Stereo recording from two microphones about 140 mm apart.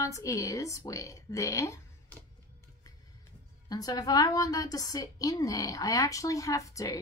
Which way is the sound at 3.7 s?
25° left (ahead or behind).